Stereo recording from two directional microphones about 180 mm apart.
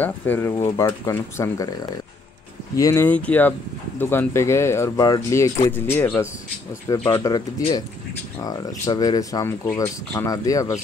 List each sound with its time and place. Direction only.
0.0 s speech: 10° left (ahead or behind)